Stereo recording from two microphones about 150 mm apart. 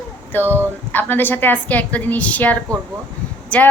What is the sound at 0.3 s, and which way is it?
A woman's voice, 15° left (ahead or behind).